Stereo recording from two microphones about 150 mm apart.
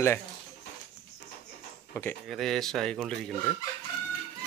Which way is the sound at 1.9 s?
15° left (ahead or behind).